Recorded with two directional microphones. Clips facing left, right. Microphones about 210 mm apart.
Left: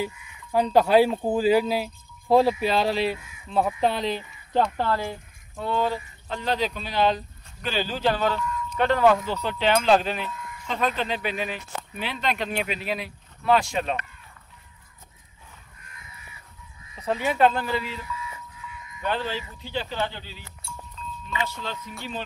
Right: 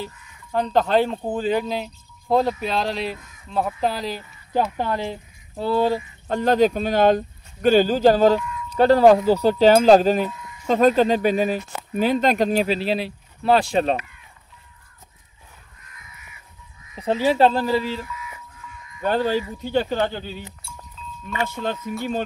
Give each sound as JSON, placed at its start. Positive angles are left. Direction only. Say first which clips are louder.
{"t": 0.0, "sound": "speech", "louder": "left 3 dB", "side_deg": 10}
{"t": 4.7, "sound": "speech", "louder": "right 1 dB", "side_deg": -15}
{"t": 5.6, "sound": "speech", "louder": "right 6 dB", "side_deg": -35}
{"t": 16.9, "sound": "speech", "louder": "right 6 dB", "side_deg": -30}
{"t": 18.7, "sound": "music", "louder": "right 6 dB", "side_deg": -40}
{"t": 19.6, "sound": "speech", "louder": "right 6 dB", "side_deg": -45}
{"t": 21.0, "sound": "a sound", "louder": "left 1 dB", "side_deg": -5}
{"t": 21.6, "sound": "speech", "louder": "right 8 dB", "side_deg": -50}